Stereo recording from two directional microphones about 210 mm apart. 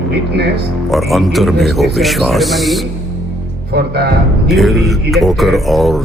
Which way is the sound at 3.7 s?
50° right (ahead or behind).